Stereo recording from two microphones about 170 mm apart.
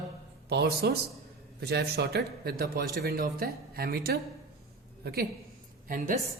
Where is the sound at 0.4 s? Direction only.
70° right (ahead or behind).